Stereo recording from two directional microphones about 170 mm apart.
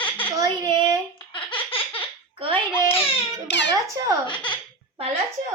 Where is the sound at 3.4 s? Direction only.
90° left.